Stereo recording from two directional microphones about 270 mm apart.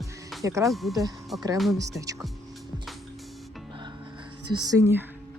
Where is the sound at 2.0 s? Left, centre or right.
Centre.